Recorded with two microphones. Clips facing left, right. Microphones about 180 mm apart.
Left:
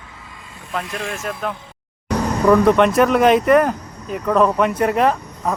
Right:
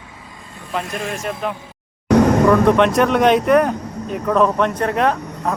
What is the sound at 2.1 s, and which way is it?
Vehicle, 65° right (ahead or behind).